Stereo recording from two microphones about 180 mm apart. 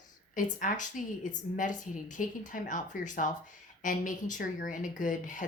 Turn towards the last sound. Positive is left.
turn(degrees=45)  # may be behind; listen again after turning